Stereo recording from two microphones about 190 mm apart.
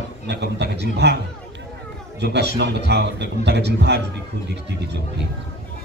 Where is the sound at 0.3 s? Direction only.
60° right (ahead or behind).